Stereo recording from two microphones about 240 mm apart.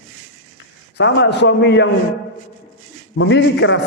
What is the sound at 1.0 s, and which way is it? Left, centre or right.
Speech, left.